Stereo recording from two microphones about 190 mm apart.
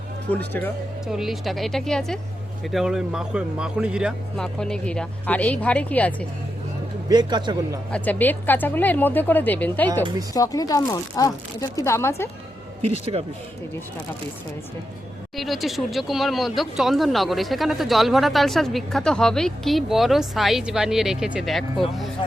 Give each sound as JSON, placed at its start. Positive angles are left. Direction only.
{"t": 1.0, "sound": "speech", "side_deg": 0}
{"t": 7.1, "sound": "a man's voice", "side_deg": -20}
{"t": 7.9, "sound": "a woman's voice", "side_deg": 10}
{"t": 12.8, "sound": "speech", "side_deg": -35}
{"t": 15.4, "sound": "speech", "side_deg": 0}